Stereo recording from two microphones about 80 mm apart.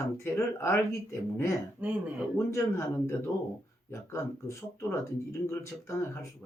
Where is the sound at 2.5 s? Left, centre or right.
Left.